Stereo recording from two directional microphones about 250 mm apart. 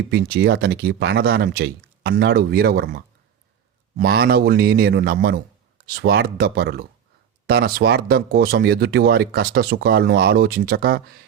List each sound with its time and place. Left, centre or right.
0.1 s speech: right